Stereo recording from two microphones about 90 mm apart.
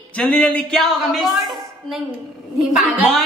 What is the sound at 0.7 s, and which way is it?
A woman's voice, centre (ahead or behind).